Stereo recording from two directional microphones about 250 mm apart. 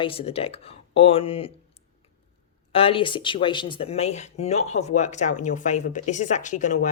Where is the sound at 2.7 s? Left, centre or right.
Left.